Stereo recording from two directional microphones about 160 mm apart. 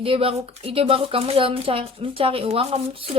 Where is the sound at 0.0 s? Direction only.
35° right (ahead or behind).